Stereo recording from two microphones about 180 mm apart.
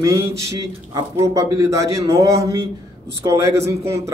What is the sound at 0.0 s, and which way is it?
Speech, 15° right (ahead or behind).